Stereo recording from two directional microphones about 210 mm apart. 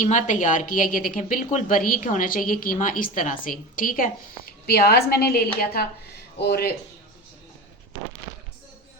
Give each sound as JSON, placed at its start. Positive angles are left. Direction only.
{"t": 0.0, "sound": "a woman's voice", "side_deg": 35}